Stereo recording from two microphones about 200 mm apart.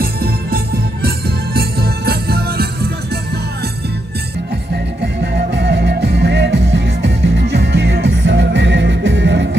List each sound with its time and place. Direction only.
0.0 s music: 50° right (ahead or behind)
1.0 s jingle bell: 50° right (ahead or behind)
5.0 s music: 55° right (ahead or behind)